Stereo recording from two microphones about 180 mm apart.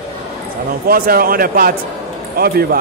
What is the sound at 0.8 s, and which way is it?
Speech, 55° right (ahead or behind).